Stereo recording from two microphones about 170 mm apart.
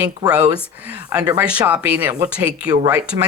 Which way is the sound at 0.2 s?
25° right (ahead or behind).